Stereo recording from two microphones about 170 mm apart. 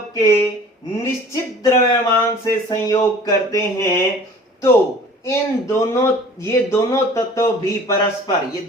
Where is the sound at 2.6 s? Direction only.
20° left (ahead or behind).